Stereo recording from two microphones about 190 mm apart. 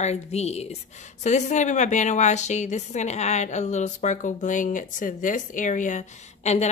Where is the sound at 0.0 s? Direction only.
35° left (ahead or behind).